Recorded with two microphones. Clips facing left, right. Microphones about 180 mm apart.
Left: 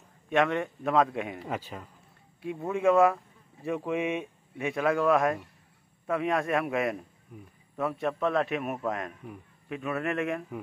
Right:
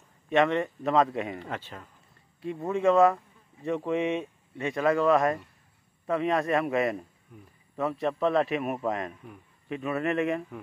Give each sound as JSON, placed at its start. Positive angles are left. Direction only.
{"t": 0.3, "sound": "speech", "side_deg": 0}